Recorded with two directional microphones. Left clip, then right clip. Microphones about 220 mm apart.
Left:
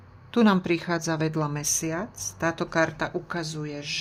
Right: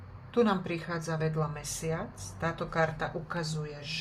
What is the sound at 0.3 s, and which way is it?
A woman's voice, 50° left (ahead or behind).